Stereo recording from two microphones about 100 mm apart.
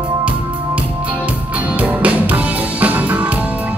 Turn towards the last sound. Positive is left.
turn(degrees=-15)  # may be behind; listen again after turning